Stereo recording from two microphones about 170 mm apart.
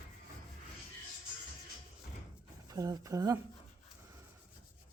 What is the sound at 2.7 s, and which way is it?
Speech, 20° right (ahead or behind).